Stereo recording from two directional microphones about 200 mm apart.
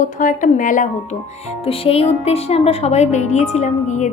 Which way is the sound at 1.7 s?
30° left (ahead or behind).